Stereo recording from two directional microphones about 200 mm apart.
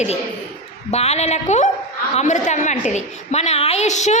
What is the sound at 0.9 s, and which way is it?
A woman's voice, 35° left (ahead or behind).